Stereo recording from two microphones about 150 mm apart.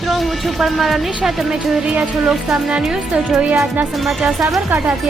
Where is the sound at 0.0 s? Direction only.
Centre (ahead or behind).